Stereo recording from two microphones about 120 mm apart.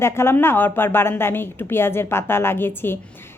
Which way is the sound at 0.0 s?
20° left (ahead or behind).